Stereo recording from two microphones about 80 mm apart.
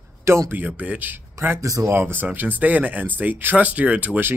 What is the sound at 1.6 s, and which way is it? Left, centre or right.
Speech, right.